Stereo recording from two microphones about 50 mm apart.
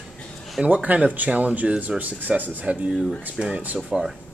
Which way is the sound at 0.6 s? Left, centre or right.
Right.